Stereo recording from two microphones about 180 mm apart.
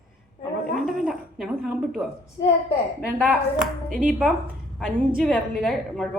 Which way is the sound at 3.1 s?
10° right (ahead or behind).